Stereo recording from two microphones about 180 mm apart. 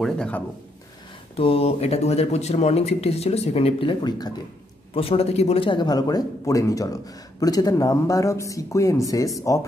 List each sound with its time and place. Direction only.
0.0 s speech: 5° left (ahead or behind)
1.3 s speech: 35° left (ahead or behind); by 9.7 s 15° left (ahead or behind)